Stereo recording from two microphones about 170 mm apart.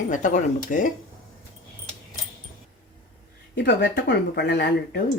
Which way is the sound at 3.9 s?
75° left (ahead or behind).